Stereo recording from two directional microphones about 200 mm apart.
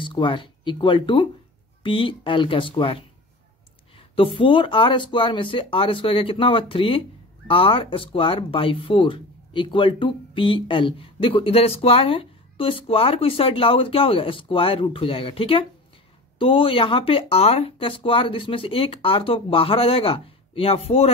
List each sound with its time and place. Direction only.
0.0 s speech: 25° left (ahead or behind)
3.9 s a sound: 25° left (ahead or behind)
4.4 s speech: 25° left (ahead or behind)